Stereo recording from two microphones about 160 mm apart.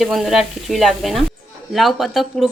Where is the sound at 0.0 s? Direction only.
Centre (ahead or behind).